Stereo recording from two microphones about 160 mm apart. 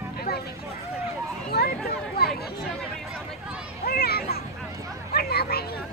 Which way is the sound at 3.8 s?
75° left (ahead or behind).